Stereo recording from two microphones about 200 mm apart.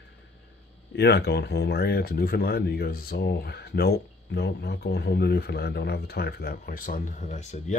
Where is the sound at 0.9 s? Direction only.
55° left (ahead or behind).